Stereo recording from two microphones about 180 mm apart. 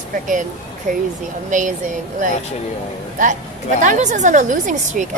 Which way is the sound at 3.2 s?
45° right (ahead or behind).